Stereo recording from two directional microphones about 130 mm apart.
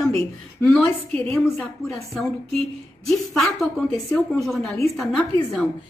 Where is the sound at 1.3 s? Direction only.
20° left (ahead or behind).